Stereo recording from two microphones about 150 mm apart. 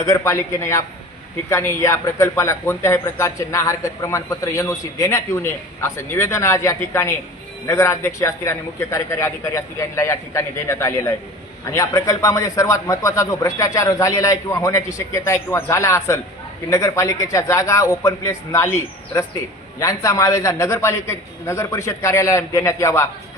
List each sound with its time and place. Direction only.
0.0 s a man's voice: 20° left (ahead or behind)